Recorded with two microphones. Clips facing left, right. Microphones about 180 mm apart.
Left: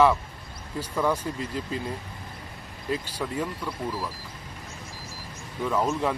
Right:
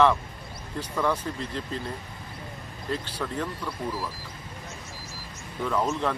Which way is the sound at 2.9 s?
10° left (ahead or behind).